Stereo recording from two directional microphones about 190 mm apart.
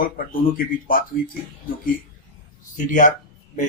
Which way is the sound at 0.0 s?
50° left (ahead or behind).